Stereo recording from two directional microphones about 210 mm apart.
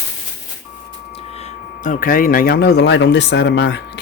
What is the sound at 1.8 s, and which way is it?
Speech, 40° left (ahead or behind).